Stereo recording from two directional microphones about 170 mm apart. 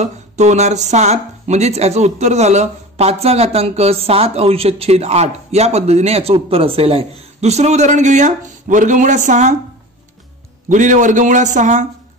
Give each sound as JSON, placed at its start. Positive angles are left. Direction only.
{"t": 0.0, "sound": "speech", "side_deg": -45}
{"t": 10.7, "sound": "a man's voice", "side_deg": -45}